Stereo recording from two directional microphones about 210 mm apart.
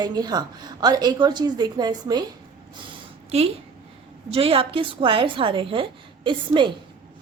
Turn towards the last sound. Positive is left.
turn(degrees=-25)  # may be behind; listen again after turning